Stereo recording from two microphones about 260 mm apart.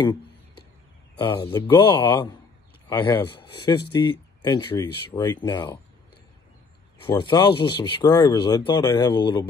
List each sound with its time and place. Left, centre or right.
1.2 s speech: centre
7.1 s speech: centre